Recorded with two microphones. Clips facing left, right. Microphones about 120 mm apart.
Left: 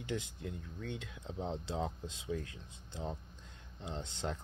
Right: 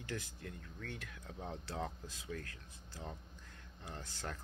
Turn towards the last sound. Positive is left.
turn(degrees=20)  # may be behind; listen again after turning